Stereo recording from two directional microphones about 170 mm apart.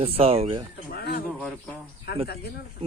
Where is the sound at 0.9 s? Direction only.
65° left (ahead or behind).